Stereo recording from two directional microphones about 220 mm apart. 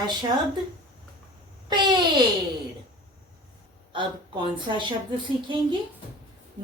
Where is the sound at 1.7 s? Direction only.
20° right (ahead or behind).